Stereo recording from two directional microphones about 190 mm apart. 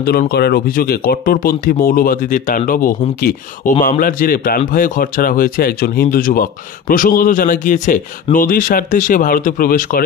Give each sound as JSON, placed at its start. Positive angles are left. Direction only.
{"t": 0.0, "sound": "speech", "side_deg": 55}